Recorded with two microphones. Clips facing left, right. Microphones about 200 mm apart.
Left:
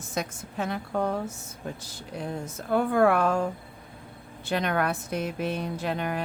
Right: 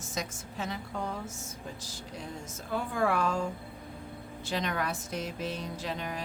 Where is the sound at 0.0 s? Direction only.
60° left (ahead or behind).